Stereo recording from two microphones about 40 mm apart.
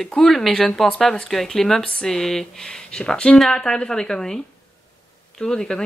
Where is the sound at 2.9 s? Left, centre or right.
Left.